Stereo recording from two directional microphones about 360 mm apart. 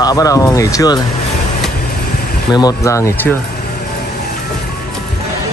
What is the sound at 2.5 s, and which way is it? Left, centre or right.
Speech, centre.